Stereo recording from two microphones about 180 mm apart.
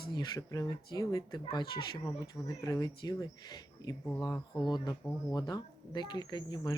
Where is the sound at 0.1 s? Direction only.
20° left (ahead or behind).